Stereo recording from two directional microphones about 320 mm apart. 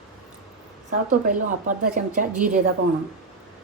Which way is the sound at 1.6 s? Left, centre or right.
Right.